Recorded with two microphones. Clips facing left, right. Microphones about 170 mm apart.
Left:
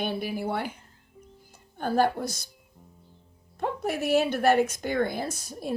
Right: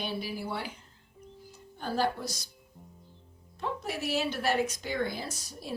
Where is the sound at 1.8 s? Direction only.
50° left (ahead or behind).